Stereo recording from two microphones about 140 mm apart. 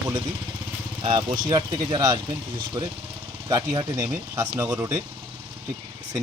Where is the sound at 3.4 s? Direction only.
25° right (ahead or behind).